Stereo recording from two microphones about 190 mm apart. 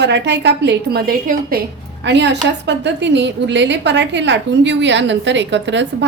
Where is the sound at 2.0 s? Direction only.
65° right (ahead or behind).